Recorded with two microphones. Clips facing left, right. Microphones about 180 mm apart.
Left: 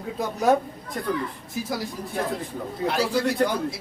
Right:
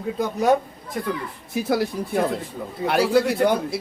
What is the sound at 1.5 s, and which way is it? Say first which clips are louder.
Speech: right 8 dB; 65° right (ahead or behind).